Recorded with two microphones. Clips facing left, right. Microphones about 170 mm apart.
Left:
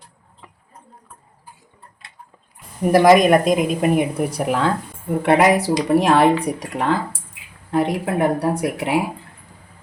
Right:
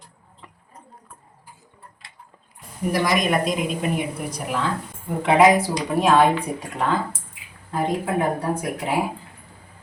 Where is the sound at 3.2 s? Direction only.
50° left (ahead or behind).